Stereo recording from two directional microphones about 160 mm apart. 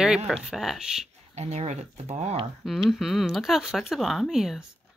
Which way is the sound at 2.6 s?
Centre (ahead or behind).